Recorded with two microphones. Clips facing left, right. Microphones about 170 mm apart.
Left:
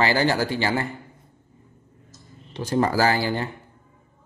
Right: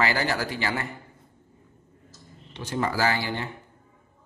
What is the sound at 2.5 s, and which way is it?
Speech, 40° left (ahead or behind).